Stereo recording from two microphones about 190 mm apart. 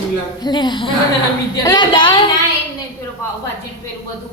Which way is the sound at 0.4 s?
25° left (ahead or behind).